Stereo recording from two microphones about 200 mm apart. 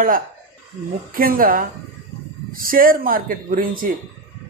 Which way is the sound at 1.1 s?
45° right (ahead or behind).